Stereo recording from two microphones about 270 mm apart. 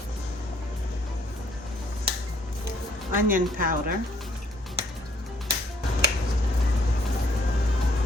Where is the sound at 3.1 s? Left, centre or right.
Right.